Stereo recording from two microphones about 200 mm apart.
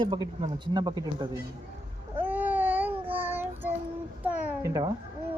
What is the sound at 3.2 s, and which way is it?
Child singing, 10° right (ahead or behind).